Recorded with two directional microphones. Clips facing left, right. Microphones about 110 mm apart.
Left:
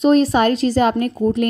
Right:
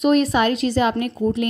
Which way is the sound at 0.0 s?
35° left (ahead or behind).